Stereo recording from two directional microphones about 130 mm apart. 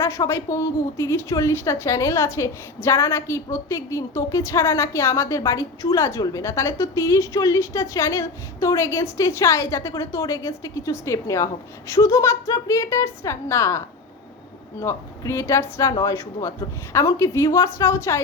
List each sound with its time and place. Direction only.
0.0 s a woman's voice: 20° left (ahead or behind)